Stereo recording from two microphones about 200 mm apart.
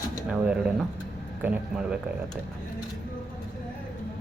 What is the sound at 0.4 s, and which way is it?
Speech, 5° right (ahead or behind).